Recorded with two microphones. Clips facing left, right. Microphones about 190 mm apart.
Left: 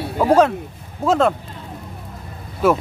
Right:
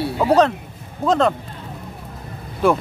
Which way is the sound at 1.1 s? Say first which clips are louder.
Left 1 dB; 5° left (ahead or behind).